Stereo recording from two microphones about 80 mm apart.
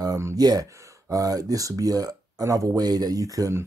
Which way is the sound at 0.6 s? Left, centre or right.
Right.